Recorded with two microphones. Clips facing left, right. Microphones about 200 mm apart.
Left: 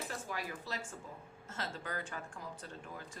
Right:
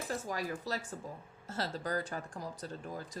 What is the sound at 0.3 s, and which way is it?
Speech, 40° right (ahead or behind).